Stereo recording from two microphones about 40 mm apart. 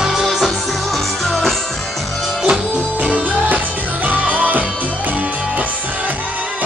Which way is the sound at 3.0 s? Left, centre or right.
Right.